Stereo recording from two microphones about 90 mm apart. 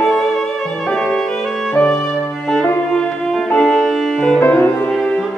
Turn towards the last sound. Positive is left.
turn(degrees=20)  # may be behind; listen again after turning